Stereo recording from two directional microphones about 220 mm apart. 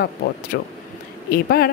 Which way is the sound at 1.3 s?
45° left (ahead or behind).